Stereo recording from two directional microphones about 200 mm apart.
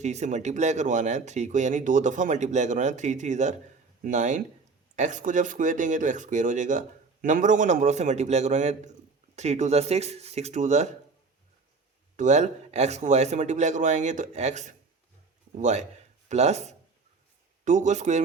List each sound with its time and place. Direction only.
0.0 s speech: 35° right (ahead or behind)
12.1 s speech: 35° right (ahead or behind)